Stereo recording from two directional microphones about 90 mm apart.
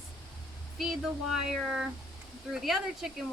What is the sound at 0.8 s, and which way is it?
Speech, 5° right (ahead or behind).